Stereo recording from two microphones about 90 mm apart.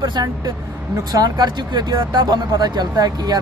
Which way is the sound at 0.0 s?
50° right (ahead or behind).